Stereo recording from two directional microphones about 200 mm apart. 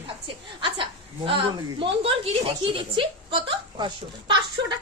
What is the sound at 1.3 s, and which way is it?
Speech, 25° right (ahead or behind).